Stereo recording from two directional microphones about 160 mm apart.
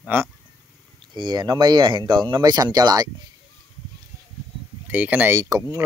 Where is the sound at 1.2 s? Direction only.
25° right (ahead or behind).